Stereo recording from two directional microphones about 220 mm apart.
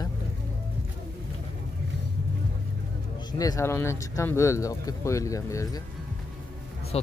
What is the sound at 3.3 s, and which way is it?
Speech, 15° left (ahead or behind).